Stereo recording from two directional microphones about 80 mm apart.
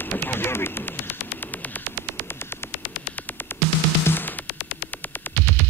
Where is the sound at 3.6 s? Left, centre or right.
Left.